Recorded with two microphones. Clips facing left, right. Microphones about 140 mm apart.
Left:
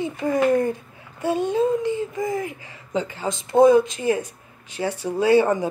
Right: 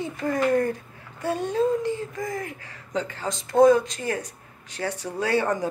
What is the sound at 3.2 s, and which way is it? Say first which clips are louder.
Speech: left 2 dB; 5° left (ahead or behind).